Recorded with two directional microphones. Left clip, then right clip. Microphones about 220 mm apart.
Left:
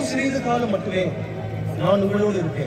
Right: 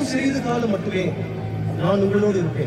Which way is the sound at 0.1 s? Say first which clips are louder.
Left 2 dB; 25° left (ahead or behind).